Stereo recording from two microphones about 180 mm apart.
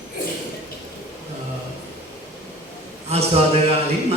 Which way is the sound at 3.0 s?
35° right (ahead or behind).